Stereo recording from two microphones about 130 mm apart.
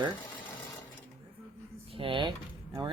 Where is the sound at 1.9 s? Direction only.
40° right (ahead or behind).